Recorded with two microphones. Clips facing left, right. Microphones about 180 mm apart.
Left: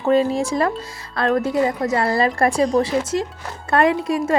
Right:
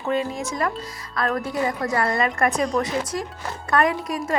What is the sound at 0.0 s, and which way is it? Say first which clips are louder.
Speech: left 7 dB; 35° left (ahead or behind).